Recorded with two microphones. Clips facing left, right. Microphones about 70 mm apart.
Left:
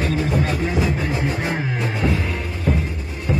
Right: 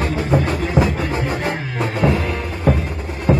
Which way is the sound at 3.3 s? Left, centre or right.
Right.